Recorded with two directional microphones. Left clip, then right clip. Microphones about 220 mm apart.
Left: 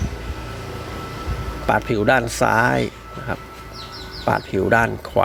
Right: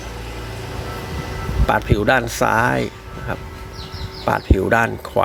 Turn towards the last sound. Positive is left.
turn(degrees=5)  # may be behind; listen again after turning